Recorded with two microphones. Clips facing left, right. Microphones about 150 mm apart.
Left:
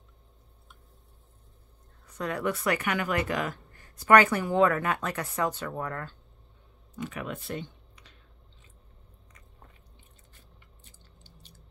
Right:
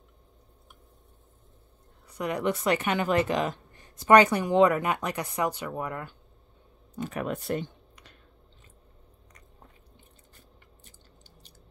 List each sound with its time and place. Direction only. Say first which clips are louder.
2.0 s a woman's voice: right 2 dB; 15° right (ahead or behind)
7.0 s speech: right 4 dB; 40° right (ahead or behind)